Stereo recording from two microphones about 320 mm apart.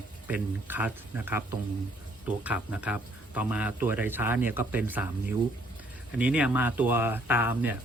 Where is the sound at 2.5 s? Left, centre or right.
Centre.